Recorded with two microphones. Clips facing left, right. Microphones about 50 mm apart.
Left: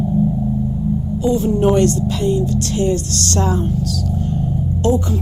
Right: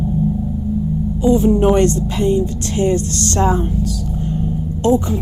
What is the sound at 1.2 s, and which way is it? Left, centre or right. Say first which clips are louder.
A woman's voice: right 3 dB; right.